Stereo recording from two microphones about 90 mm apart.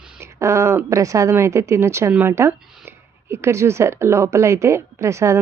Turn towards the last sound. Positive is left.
turn(degrees=-35)  # may be behind; listen again after turning